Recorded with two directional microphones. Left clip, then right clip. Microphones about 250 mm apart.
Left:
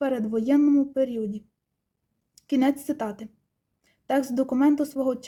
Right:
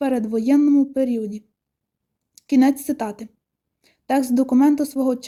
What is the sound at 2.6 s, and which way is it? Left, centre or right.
Speech, centre.